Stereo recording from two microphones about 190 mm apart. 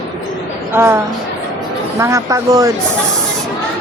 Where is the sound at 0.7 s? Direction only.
10° right (ahead or behind).